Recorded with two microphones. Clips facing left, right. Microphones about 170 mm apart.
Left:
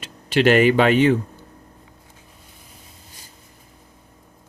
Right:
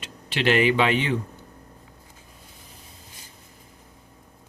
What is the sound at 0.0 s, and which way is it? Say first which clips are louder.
Speech: left 7 dB; 45° left (ahead or behind).